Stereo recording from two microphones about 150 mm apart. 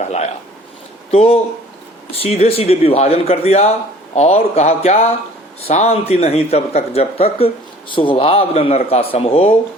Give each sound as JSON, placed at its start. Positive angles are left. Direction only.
{"t": 0.0, "sound": "speech", "side_deg": 50}